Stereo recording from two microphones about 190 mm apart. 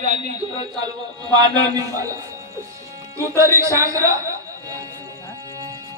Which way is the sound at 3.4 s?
15° right (ahead or behind).